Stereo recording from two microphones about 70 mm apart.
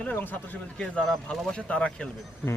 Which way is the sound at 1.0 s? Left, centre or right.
Centre.